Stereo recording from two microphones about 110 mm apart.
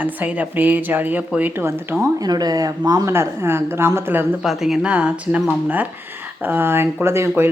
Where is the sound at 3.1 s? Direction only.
20° right (ahead or behind).